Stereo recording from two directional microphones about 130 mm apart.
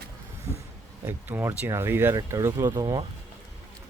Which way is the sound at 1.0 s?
15° right (ahead or behind).